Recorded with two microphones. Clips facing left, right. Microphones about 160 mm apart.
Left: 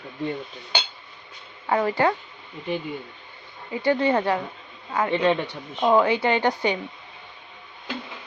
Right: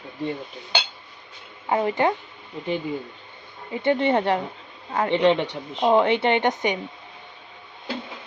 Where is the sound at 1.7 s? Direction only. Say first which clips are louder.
Even; 20° right (ahead or behind).